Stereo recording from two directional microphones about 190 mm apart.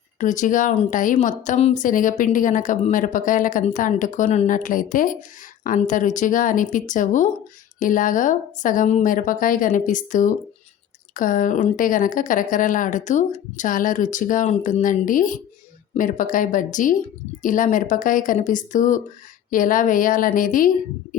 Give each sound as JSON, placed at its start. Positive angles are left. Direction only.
{"t": 0.2, "sound": "a woman's voice", "side_deg": 40}